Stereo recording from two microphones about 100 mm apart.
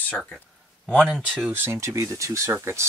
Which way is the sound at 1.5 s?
25° right (ahead or behind).